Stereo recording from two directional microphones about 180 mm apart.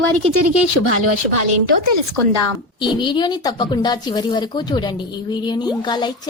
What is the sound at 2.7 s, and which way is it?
A woman's voice, 25° left (ahead or behind).